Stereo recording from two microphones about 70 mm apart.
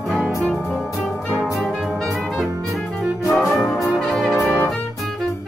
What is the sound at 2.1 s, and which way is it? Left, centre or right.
Music, centre.